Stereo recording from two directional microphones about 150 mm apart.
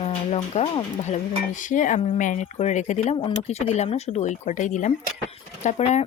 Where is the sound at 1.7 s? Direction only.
60° left (ahead or behind).